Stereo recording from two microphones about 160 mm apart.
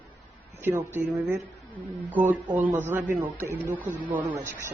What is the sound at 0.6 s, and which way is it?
Speech, 15° right (ahead or behind).